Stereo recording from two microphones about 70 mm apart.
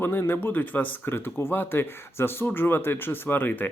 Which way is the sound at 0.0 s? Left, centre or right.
Left.